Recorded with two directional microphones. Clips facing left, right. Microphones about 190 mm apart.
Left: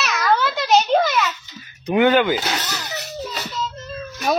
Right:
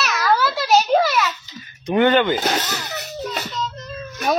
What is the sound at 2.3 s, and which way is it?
Speech, 45° right (ahead or behind).